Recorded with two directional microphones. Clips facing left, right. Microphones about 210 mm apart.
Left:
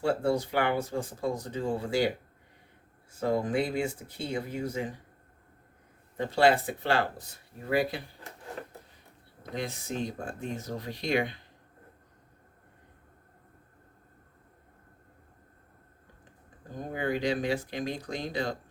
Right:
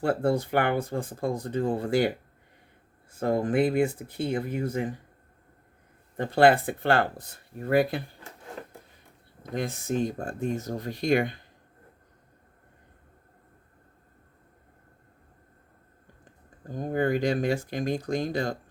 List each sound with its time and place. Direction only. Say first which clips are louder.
0.0 s speech: right 2 dB; 55° right (ahead or behind)
6.1 s speech: right 4 dB; 55° right (ahead or behind)
9.6 s speech: right 6 dB; 50° right (ahead or behind)
16.9 s speech: right 4 dB; 50° right (ahead or behind)